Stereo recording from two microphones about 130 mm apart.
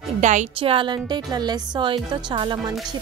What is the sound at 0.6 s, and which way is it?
Speech, 40° right (ahead or behind).